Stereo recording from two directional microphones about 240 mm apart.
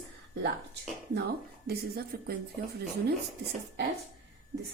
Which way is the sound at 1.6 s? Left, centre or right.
Right.